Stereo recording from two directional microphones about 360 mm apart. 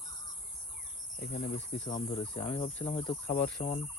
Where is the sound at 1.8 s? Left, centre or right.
Centre.